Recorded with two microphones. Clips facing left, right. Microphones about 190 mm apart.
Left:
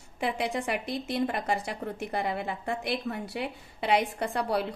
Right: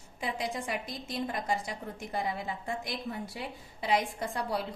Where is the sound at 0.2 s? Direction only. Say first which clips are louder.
Left 5 dB; 60° left (ahead or behind).